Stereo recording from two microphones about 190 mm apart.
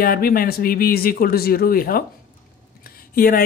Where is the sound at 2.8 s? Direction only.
50° left (ahead or behind).